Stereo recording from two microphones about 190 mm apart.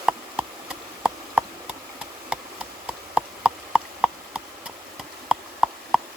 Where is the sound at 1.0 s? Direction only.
5° right (ahead or behind).